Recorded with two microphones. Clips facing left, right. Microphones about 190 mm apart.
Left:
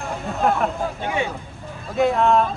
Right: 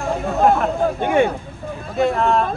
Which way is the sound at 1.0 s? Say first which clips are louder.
Right 9 dB; 55° right (ahead or behind).